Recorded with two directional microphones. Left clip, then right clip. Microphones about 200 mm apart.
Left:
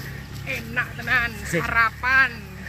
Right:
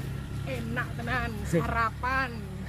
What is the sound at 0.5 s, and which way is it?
Speech, 10° right (ahead or behind).